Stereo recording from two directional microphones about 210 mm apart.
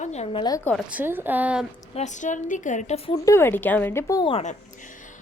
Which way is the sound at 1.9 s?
35° left (ahead or behind).